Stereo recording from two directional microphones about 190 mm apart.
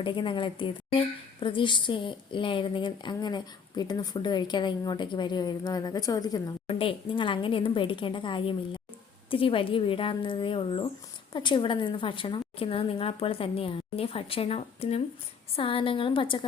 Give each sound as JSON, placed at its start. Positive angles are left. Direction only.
{"t": 0.0, "sound": "a woman's voice", "side_deg": 25}